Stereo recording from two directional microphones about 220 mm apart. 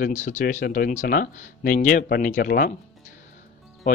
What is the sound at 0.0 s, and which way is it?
Speech, 35° left (ahead or behind).